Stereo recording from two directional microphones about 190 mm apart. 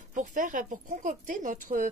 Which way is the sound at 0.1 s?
40° right (ahead or behind).